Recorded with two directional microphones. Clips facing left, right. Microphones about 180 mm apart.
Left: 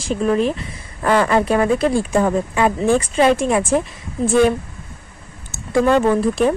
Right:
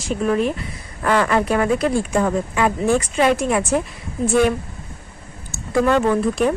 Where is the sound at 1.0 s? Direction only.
30° left (ahead or behind).